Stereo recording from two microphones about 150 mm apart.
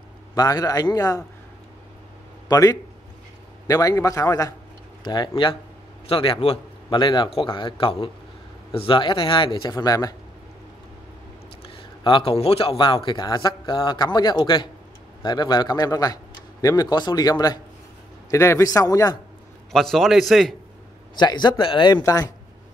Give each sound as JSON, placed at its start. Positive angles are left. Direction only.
{"t": 0.3, "sound": "a man's voice", "side_deg": 25}
{"t": 2.4, "sound": "a man's voice", "side_deg": 25}
{"t": 12.0, "sound": "a man's voice", "side_deg": 30}
{"t": 19.7, "sound": "a man's voice", "side_deg": 0}
{"t": 21.2, "sound": "a man's voice", "side_deg": 30}